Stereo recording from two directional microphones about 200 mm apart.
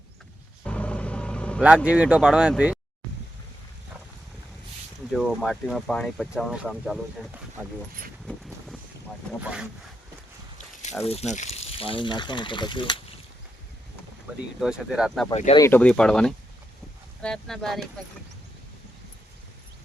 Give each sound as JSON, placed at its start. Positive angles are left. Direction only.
{"t": 0.6, "sound": "vehicle", "side_deg": 5}
{"t": 1.6, "sound": "speech", "side_deg": -5}
{"t": 5.1, "sound": "speech", "side_deg": 0}
{"t": 8.3, "sound": "vehicle", "side_deg": 0}
{"t": 9.4, "sound": "speech", "side_deg": -5}
{"t": 11.0, "sound": "speech", "side_deg": 30}
{"t": 14.6, "sound": "speech", "side_deg": 0}
{"t": 15.3, "sound": "speech", "side_deg": 30}
{"t": 15.5, "sound": "speech", "side_deg": 10}